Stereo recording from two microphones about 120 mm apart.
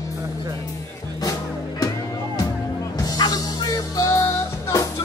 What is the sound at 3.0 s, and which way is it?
Music, 30° left (ahead or behind).